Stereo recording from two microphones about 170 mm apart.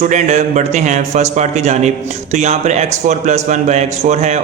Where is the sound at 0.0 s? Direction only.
45° right (ahead or behind).